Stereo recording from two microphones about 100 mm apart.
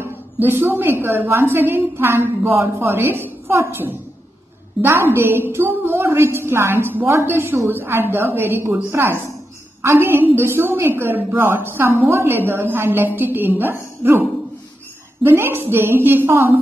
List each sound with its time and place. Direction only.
0.0 s a woman's voice: 20° right (ahead or behind)
15.2 s a woman's voice: 25° right (ahead or behind)